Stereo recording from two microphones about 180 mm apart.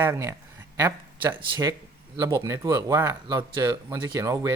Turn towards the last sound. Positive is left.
turn(degrees=-20)  # may be behind; listen again after turning